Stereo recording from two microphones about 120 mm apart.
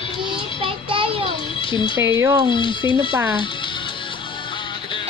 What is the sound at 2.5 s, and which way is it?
Speech, 45° left (ahead or behind).